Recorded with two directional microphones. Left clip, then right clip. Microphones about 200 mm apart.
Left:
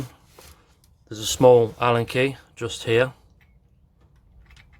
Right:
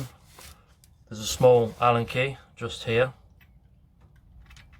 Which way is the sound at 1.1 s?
50° left (ahead or behind).